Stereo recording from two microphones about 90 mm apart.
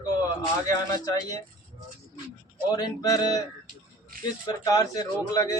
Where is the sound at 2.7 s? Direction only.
50° left (ahead or behind).